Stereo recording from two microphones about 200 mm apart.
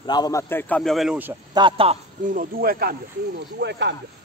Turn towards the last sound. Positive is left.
turn(degrees=-55)  # may be behind; listen again after turning